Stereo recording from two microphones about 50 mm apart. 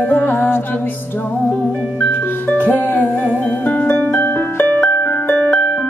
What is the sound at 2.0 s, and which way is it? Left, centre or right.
Music, left.